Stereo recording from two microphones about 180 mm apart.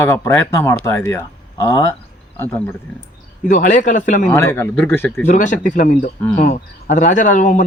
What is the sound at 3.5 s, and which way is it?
Speech, 45° left (ahead or behind).